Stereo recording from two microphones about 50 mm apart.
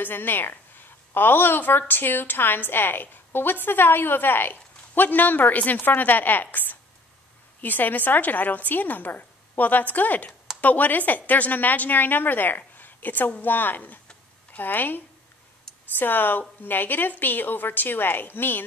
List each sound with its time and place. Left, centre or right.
0.0 s a woman's voice: left